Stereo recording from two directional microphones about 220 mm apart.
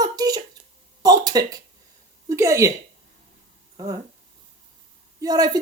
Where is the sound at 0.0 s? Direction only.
15° right (ahead or behind).